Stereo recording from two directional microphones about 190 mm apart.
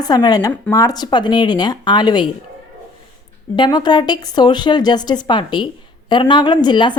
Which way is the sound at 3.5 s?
25° left (ahead or behind).